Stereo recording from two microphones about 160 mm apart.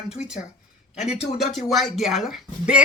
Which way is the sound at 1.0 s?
40° left (ahead or behind).